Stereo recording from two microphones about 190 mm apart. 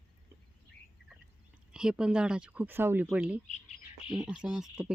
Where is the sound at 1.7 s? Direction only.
5° right (ahead or behind).